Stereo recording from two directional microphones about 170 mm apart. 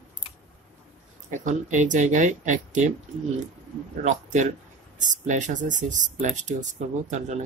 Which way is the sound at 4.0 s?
45° right (ahead or behind).